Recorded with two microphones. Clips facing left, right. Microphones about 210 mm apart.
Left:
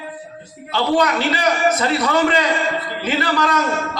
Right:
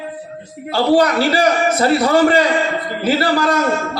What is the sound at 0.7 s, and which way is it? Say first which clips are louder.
A man's voice: right 4 dB; 35° right (ahead or behind).